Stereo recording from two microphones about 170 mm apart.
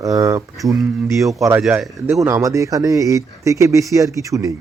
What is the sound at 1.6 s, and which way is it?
Speech, centre (ahead or behind).